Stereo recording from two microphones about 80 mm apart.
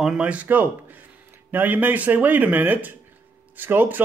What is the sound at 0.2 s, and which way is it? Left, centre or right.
Speech, centre.